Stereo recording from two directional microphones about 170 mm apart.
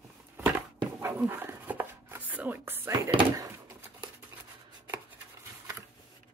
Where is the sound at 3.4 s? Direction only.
20° right (ahead or behind).